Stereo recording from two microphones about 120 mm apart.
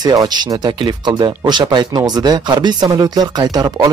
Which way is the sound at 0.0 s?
35° right (ahead or behind).